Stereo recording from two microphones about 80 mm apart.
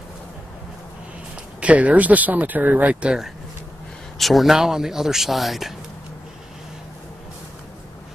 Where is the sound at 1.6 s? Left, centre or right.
Centre.